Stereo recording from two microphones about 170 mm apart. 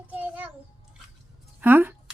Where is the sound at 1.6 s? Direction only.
10° right (ahead or behind).